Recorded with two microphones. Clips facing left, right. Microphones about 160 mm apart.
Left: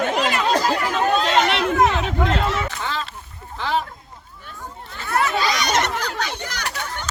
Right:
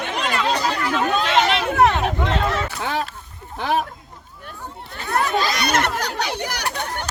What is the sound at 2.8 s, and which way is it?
Duck, 70° right (ahead or behind).